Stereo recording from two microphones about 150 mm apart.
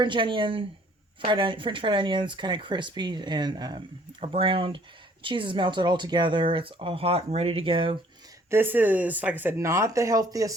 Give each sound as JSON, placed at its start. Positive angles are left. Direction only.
{"t": 0.0, "sound": "speech", "side_deg": -35}
{"t": 8.4, "sound": "speech", "side_deg": -15}